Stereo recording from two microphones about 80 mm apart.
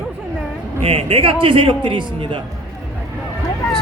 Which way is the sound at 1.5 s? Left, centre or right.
Right.